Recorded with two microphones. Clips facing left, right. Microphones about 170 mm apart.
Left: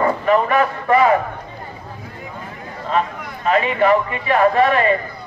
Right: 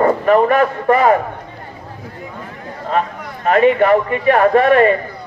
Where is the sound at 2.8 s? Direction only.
50° right (ahead or behind).